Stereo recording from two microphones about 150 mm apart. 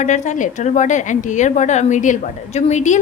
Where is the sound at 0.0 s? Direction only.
55° left (ahead or behind).